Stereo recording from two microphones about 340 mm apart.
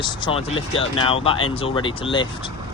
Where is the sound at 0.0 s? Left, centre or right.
Centre.